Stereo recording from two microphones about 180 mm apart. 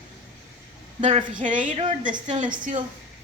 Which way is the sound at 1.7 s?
30° right (ahead or behind).